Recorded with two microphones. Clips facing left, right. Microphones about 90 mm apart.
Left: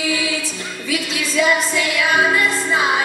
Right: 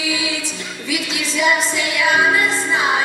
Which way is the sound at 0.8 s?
20° right (ahead or behind).